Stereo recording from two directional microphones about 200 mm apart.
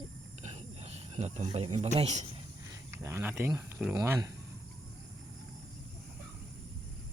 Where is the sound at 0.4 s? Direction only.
35° right (ahead or behind).